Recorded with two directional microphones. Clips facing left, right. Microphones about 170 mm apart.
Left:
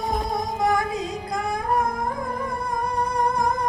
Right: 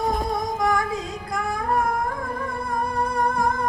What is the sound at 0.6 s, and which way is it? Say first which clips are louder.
Music: left 1 dB; 25° left (ahead or behind).